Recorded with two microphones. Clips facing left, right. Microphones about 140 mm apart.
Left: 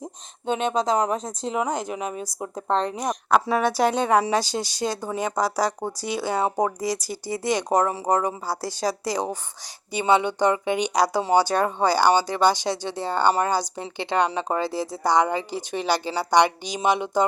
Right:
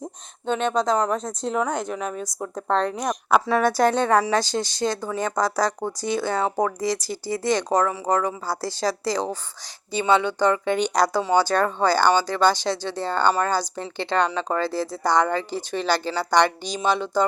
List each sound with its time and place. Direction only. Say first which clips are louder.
0.0 s speech: right 1 dB; 10° left (ahead or behind)